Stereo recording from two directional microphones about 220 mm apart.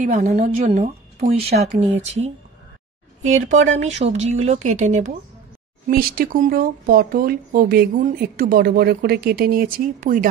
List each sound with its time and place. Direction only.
0.0 s speech: 35° right (ahead or behind)
3.2 s speech: 35° right (ahead or behind)